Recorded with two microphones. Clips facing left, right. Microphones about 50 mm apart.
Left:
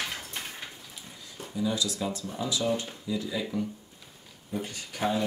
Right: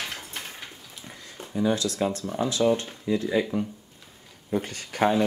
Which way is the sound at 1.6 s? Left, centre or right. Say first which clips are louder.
Right 5 dB; right.